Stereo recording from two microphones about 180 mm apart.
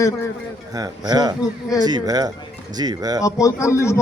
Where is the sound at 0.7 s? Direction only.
20° right (ahead or behind).